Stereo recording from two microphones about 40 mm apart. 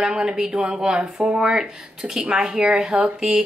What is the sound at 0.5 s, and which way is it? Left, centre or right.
Speech, right.